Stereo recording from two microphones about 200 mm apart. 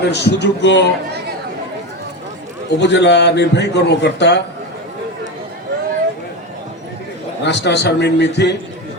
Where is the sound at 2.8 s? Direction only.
60° left (ahead or behind).